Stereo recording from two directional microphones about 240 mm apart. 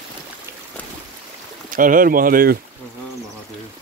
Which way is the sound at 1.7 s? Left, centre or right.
Right.